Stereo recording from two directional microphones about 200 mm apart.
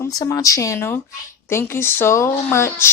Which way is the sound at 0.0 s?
15° left (ahead or behind).